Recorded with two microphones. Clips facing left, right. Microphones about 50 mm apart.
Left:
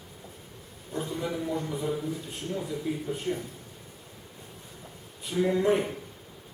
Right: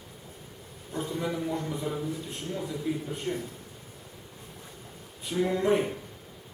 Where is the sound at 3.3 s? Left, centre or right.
Right.